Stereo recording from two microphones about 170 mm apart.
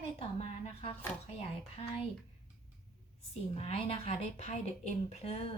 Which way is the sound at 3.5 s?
35° left (ahead or behind).